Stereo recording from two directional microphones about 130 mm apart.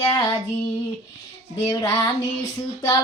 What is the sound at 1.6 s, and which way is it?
Female singing, 25° left (ahead or behind).